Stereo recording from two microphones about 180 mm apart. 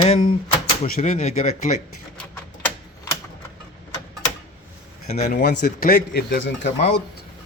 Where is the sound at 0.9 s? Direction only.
45° left (ahead or behind).